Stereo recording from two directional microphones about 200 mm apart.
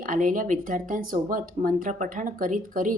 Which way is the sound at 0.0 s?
40° right (ahead or behind).